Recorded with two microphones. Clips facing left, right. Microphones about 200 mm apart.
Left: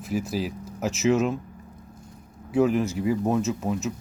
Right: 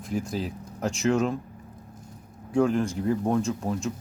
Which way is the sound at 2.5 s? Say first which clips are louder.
Left 1 dB; 5° left (ahead or behind).